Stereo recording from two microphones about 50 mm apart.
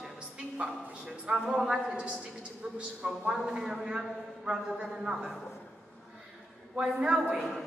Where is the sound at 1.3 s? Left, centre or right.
Centre.